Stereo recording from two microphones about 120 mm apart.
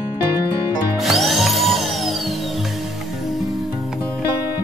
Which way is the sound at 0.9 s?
Centre (ahead or behind).